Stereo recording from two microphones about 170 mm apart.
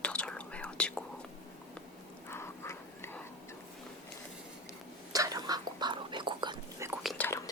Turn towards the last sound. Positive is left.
turn(degrees=10)  # may be behind; listen again after turning